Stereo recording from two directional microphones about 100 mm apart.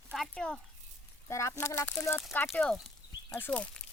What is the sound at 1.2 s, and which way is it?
Speech, 30° left (ahead or behind).